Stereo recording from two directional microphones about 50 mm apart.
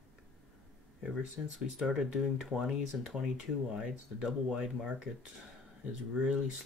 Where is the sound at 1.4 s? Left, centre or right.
Right.